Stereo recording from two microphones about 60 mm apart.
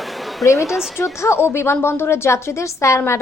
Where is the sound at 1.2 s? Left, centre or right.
Left.